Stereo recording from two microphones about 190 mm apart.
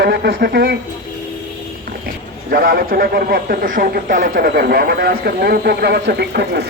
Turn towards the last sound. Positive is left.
turn(degrees=-60)  # may be behind; listen again after turning